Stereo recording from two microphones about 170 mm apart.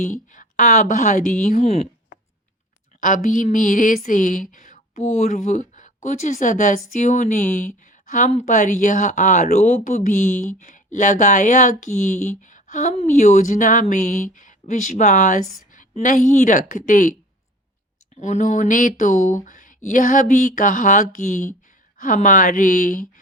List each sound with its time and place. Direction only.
0.0 s speech: 50° left (ahead or behind)
1.6 s speech: 35° left (ahead or behind)
3.0 s speech: 50° left (ahead or behind)
18.2 s speech: 45° left (ahead or behind)